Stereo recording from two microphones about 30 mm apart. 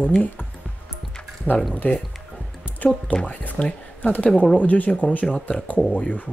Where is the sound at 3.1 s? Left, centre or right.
Left.